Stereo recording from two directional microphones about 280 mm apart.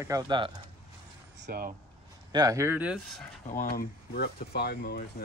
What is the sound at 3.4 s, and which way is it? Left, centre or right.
Speech, left.